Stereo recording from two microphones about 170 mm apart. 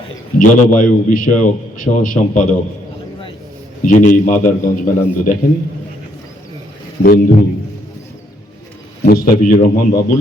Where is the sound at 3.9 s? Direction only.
50° left (ahead or behind).